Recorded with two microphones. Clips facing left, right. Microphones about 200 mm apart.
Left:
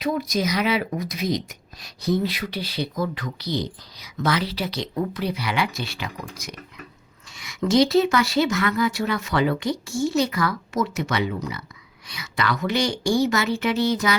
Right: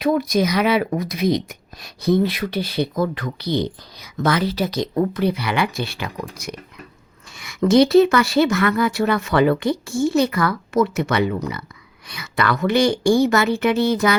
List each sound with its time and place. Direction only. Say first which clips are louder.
0.0 s speech: right 6 dB; 60° right (ahead or behind)